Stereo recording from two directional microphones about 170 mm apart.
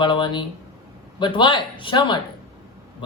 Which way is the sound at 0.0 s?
30° left (ahead or behind).